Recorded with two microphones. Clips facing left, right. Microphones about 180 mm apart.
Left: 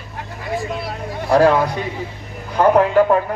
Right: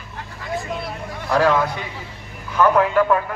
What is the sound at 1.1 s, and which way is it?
A man's voice, 35° left (ahead or behind).